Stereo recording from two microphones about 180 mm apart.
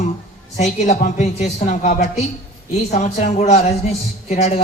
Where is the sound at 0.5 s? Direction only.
40° left (ahead or behind).